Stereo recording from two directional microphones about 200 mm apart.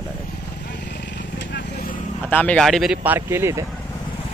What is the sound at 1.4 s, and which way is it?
Vehicle, 55° left (ahead or behind).